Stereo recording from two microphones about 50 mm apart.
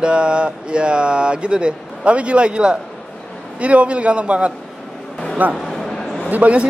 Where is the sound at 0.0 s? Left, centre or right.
Centre.